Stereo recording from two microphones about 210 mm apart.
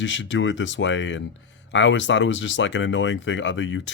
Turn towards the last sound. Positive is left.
turn(degrees=60)  # may be behind; listen again after turning